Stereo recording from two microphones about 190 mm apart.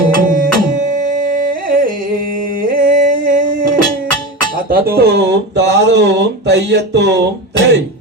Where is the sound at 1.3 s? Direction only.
50° right (ahead or behind).